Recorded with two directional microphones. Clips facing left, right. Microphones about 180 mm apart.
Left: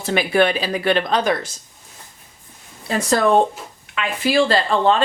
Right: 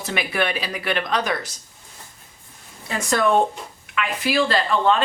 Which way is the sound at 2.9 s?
35° left (ahead or behind).